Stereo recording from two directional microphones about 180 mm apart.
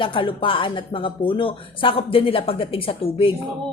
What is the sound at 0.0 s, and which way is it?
Speech, 30° left (ahead or behind).